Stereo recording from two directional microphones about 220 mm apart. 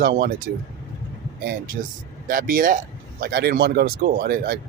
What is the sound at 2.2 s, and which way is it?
Speech, 40° right (ahead or behind).